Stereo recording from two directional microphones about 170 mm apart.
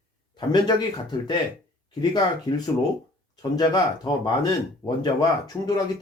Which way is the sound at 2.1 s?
20° left (ahead or behind).